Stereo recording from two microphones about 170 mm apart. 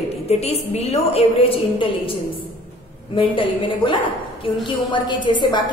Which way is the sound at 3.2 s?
30° left (ahead or behind).